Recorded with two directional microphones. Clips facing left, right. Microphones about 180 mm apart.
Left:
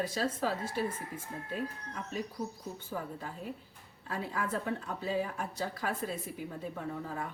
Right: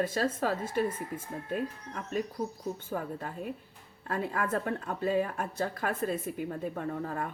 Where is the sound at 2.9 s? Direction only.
50° right (ahead or behind).